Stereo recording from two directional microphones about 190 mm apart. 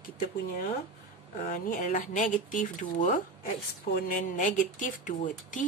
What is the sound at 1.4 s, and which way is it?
A woman's voice, 45° left (ahead or behind).